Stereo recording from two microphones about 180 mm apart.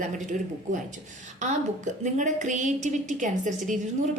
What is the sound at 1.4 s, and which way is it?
A woman's voice, 40° right (ahead or behind).